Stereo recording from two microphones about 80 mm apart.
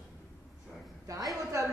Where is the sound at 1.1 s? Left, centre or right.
Right.